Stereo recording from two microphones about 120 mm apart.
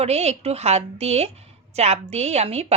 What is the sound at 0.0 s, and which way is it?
Speech, 60° right (ahead or behind).